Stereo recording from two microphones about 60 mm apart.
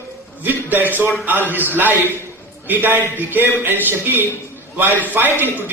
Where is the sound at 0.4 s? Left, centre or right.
Right.